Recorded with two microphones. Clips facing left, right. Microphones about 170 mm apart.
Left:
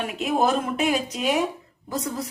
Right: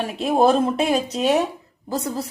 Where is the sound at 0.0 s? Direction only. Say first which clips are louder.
Right 5 dB; 30° right (ahead or behind).